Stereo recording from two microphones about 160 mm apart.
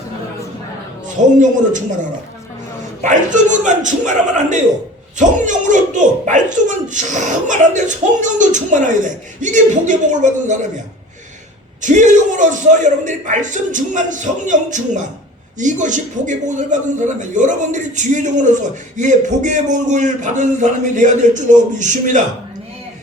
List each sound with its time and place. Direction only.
1.1 s a man's voice: 50° right (ahead or behind)
3.0 s a man's voice: 50° right (ahead or behind)
11.8 s a man's voice: 50° right (ahead or behind)